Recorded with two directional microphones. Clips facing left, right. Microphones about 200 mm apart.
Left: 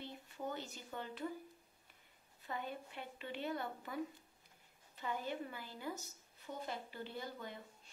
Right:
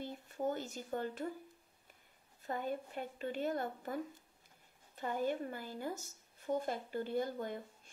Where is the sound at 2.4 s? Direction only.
45° right (ahead or behind).